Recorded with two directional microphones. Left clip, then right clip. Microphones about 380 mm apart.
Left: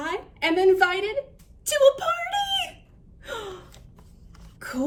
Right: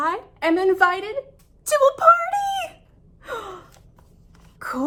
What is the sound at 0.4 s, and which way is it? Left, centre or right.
Speech, centre.